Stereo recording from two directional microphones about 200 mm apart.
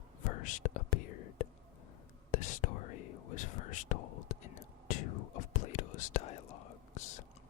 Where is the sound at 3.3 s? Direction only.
40° left (ahead or behind).